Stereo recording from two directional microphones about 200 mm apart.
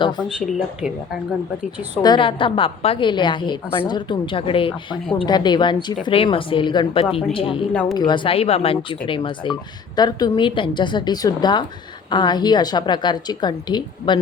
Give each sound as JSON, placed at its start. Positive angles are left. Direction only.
{"t": 2.0, "sound": "a woman's voice", "side_deg": 20}
{"t": 7.7, "sound": "speech", "side_deg": 10}
{"t": 7.9, "sound": "a woman's voice", "side_deg": 25}